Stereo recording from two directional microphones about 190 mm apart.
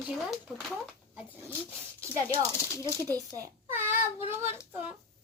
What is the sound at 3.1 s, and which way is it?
Speech, 15° right (ahead or behind).